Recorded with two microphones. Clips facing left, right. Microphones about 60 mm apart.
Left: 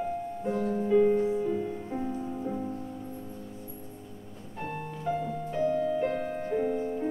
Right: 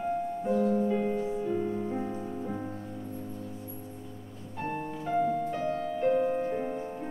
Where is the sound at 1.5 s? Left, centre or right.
Centre.